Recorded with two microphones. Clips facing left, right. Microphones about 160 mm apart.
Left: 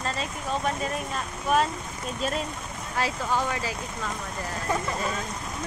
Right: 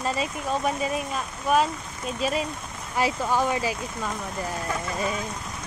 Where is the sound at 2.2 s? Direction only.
5° right (ahead or behind).